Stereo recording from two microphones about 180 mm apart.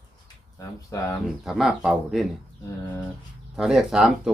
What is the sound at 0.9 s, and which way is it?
Speech, 15° left (ahead or behind).